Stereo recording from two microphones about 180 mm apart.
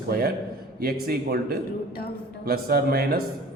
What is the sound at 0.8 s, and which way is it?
A man's voice, 60° right (ahead or behind).